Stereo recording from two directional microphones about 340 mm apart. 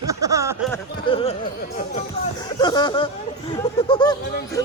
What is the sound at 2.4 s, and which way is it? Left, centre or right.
Speech, centre.